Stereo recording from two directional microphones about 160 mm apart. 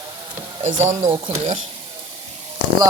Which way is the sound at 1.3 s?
40° right (ahead or behind).